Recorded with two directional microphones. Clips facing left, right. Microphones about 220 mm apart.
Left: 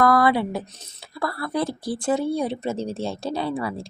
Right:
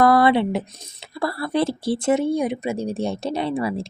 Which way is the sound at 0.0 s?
25° right (ahead or behind).